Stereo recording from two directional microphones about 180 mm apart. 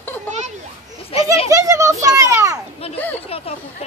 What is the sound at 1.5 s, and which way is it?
Children playing, 15° right (ahead or behind).